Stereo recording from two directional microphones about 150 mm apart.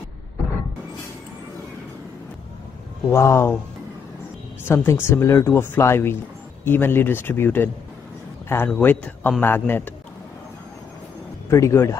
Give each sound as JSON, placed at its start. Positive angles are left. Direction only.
{"t": 3.1, "sound": "speech", "side_deg": 20}
{"t": 4.6, "sound": "speech", "side_deg": 15}
{"t": 11.5, "sound": "speech", "side_deg": 20}